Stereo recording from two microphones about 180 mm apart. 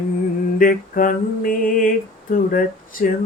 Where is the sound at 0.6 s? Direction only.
50° left (ahead or behind).